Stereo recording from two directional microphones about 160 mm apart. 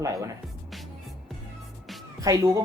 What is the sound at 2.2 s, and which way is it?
Speech, 20° right (ahead or behind).